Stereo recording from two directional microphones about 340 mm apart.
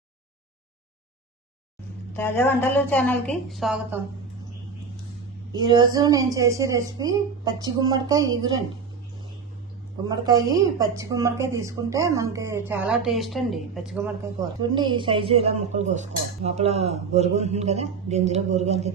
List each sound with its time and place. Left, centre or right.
2.1 s a woman's voice: centre
5.5 s a woman's voice: centre
10.1 s a woman's voice: centre
14.6 s speech: centre